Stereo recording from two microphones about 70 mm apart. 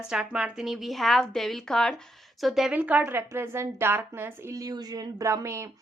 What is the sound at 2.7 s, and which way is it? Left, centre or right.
A woman's voice, right.